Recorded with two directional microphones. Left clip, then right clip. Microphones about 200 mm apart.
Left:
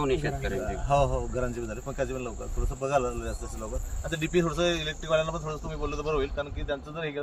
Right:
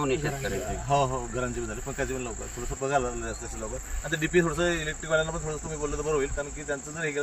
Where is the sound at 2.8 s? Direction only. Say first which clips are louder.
Even; centre (ahead or behind).